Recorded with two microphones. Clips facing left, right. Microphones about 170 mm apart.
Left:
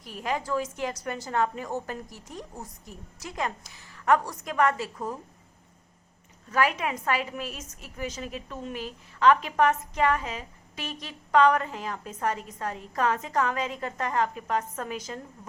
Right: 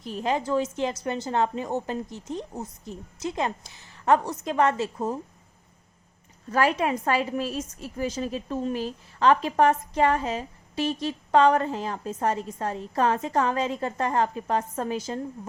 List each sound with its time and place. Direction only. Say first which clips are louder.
0.0 s a woman's voice: right 4 dB; 25° right (ahead or behind)
6.5 s a woman's voice: right 3 dB; 30° right (ahead or behind)